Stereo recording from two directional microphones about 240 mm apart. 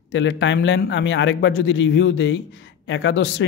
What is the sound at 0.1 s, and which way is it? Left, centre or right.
A man's voice, left.